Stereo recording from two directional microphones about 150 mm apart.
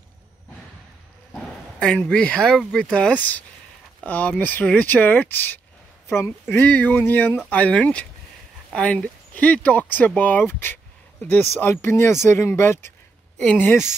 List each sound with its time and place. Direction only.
1.3 s a woman's voice: 5° left (ahead or behind)